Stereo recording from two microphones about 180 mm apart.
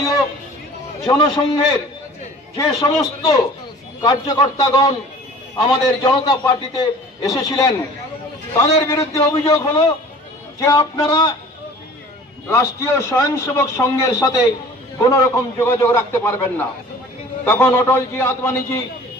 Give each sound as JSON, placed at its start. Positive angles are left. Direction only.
{"t": 1.0, "sound": "a man's voice", "side_deg": 20}
{"t": 2.8, "sound": "a man's voice", "side_deg": 20}
{"t": 12.4, "sound": "a man's voice", "side_deg": 20}